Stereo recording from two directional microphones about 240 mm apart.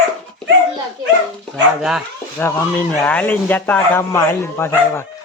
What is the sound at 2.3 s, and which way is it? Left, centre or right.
Speech, centre.